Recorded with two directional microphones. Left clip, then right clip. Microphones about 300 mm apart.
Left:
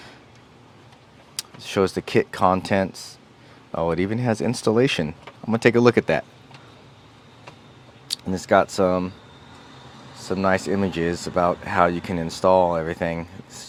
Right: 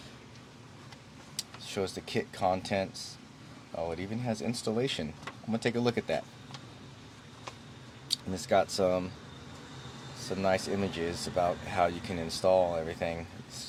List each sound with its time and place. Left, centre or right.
1.4 s speech: left
8.0 s speech: left
10.2 s speech: left